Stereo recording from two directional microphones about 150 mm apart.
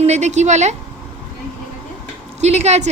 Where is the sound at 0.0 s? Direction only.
45° right (ahead or behind).